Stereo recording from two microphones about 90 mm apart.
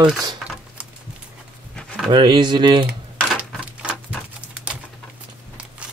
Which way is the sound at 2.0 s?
60° right (ahead or behind).